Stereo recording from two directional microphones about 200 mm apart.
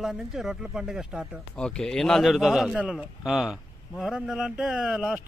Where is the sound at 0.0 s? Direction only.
Centre (ahead or behind).